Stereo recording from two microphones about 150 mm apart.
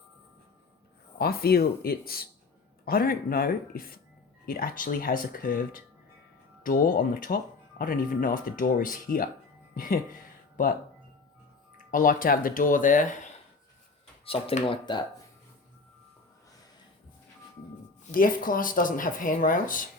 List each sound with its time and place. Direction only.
1.2 s speech: 90° left; by 10.0 s 70° left (ahead or behind)
11.9 s speech: 65° left (ahead or behind)
14.3 s speech: 40° left (ahead or behind)
18.1 s speech: 70° left (ahead or behind)